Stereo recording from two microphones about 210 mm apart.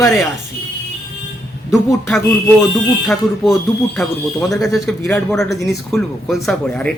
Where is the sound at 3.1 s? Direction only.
Centre (ahead or behind).